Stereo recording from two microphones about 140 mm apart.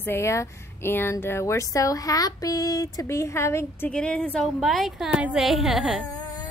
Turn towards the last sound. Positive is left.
turn(degrees=-5)  # may be behind; listen again after turning